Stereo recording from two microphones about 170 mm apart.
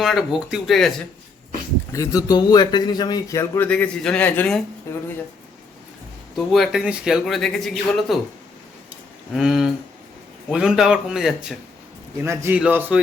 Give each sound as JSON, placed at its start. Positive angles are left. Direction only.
{"t": 0.0, "sound": "speech", "side_deg": 0}
{"t": 1.9, "sound": "a man's voice", "side_deg": 20}
{"t": 6.3, "sound": "speech", "side_deg": 0}
{"t": 9.3, "sound": "speech", "side_deg": 0}
{"t": 12.2, "sound": "a man's voice", "side_deg": -15}